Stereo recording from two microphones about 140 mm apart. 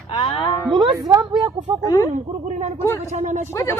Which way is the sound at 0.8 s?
35° right (ahead or behind).